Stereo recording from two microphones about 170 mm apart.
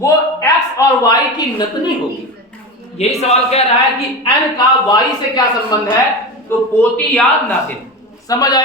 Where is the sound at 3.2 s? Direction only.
40° left (ahead or behind).